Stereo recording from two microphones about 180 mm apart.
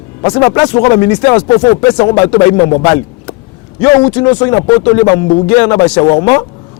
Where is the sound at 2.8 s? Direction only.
20° left (ahead or behind).